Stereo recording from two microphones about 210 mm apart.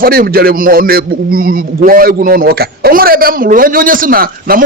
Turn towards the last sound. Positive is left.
turn(degrees=-45)  # may be behind; listen again after turning